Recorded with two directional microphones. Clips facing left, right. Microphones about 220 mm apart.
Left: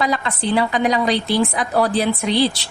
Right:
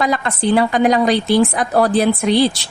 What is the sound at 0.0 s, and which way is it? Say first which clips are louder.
A woman's voice: right 3 dB; 50° right (ahead or behind).